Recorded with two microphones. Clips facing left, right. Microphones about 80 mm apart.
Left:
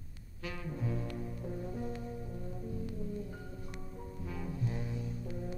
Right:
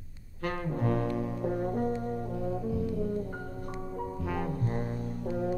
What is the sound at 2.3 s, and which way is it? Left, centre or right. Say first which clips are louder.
Music: right 10 dB; right.